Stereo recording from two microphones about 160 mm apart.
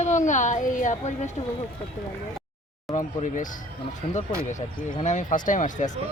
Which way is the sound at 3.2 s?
55° left (ahead or behind).